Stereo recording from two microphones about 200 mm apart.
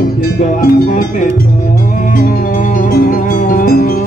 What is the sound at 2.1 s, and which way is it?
Music, 40° left (ahead or behind).